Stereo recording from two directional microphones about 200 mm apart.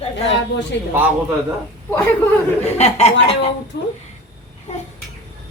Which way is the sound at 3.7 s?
55° left (ahead or behind).